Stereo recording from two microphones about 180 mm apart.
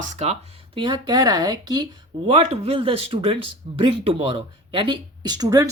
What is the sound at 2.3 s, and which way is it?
Speech, 35° right (ahead or behind).